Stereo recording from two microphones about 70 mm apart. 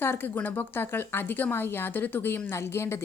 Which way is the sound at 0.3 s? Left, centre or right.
Left.